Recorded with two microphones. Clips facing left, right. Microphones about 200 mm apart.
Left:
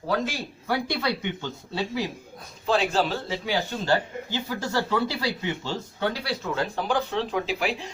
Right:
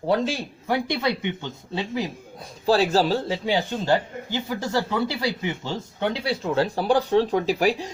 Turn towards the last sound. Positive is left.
turn(degrees=-40)  # may be behind; listen again after turning